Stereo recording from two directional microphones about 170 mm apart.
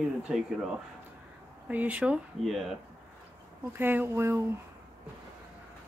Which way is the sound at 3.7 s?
10° right (ahead or behind).